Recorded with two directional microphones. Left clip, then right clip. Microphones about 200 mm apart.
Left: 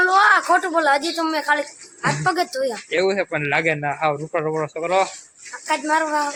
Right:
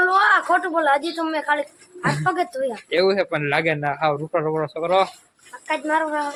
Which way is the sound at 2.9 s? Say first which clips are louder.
Right 2 dB; 10° right (ahead or behind).